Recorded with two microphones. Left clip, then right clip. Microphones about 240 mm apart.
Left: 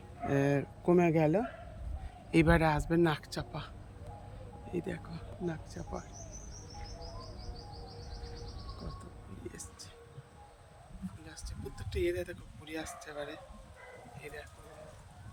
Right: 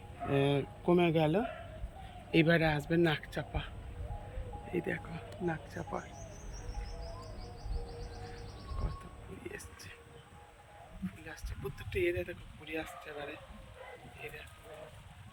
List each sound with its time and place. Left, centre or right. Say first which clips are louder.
0.3 s a sound: even; centre
1.2 s speech: left 1 dB; left
4.7 s speech: right 3 dB; centre
11.8 s speech: even; centre